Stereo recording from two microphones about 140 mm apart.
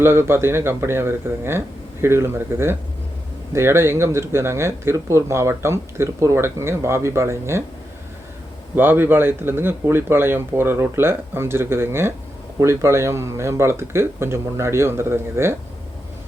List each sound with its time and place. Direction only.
0.0 s speech: 15° right (ahead or behind)
8.7 s speech: 15° right (ahead or behind)